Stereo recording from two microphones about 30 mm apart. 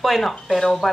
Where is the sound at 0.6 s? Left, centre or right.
Centre.